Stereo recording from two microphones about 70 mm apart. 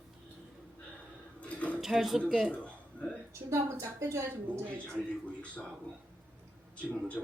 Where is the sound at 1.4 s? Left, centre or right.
Centre.